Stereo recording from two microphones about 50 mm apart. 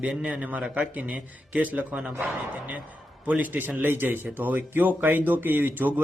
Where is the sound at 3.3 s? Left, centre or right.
Right.